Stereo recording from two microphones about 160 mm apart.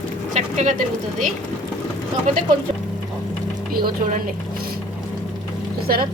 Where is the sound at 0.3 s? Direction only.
50° right (ahead or behind).